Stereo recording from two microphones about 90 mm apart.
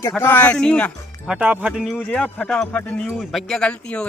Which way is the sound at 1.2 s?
10° right (ahead or behind).